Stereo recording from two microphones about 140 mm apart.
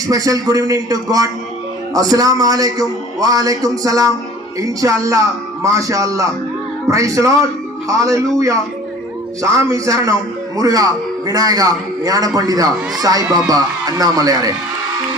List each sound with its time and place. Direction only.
0.1 s speech: 25° right (ahead or behind)